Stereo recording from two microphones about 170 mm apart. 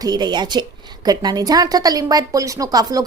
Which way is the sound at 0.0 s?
25° right (ahead or behind).